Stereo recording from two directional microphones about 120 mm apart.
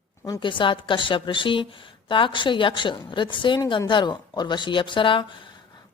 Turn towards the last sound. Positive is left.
turn(degrees=40)  # may be behind; listen again after turning